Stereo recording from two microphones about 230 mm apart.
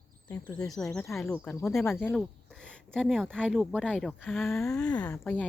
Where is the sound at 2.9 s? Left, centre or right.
Centre.